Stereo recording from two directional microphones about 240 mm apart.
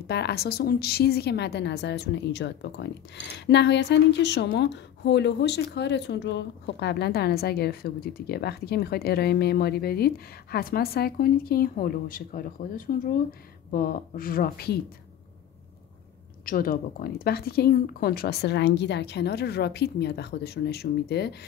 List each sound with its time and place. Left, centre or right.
0.1 s a woman's voice: left
16.4 s speech: left